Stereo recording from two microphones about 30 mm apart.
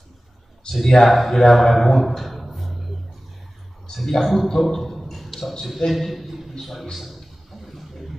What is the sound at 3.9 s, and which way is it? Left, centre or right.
Speech, centre.